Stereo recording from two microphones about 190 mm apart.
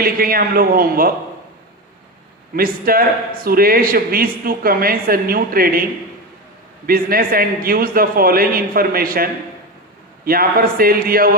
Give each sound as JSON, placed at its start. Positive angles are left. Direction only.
{"t": 0.0, "sound": "speech", "side_deg": -50}
{"t": 2.6, "sound": "speech", "side_deg": -50}